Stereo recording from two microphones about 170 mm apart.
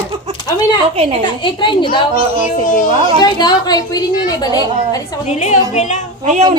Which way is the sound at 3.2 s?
25° left (ahead or behind).